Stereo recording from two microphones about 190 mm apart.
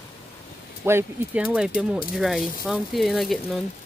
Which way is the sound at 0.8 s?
10° right (ahead or behind).